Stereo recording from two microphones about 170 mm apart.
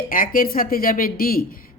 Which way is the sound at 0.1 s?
55° left (ahead or behind).